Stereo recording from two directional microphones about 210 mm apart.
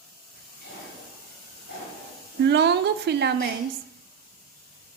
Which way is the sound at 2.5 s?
55° right (ahead or behind).